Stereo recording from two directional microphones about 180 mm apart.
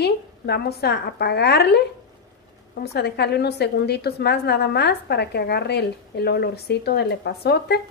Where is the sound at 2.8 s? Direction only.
65° left (ahead or behind).